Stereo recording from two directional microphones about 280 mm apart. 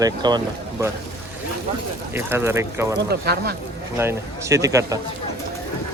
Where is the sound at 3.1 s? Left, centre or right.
Right.